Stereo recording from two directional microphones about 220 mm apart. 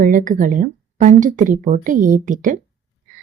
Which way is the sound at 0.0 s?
35° right (ahead or behind).